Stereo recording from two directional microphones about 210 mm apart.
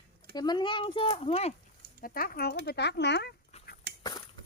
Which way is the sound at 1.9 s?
45° left (ahead or behind).